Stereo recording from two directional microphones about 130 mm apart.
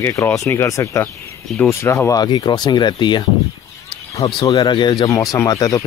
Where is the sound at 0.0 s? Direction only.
20° left (ahead or behind).